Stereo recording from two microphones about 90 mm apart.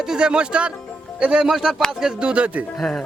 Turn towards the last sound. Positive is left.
turn(degrees=5)  # may be behind; listen again after turning